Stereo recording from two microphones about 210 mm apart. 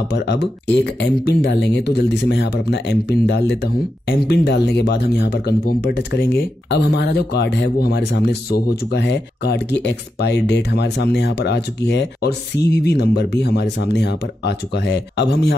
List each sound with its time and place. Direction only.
0.1 s speech: 55° left (ahead or behind)